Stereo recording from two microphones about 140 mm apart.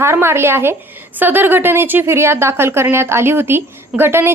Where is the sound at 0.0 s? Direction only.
20° right (ahead or behind).